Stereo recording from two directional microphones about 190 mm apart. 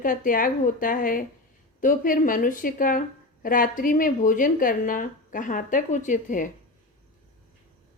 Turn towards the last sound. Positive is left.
turn(degrees=45)  # may be behind; listen again after turning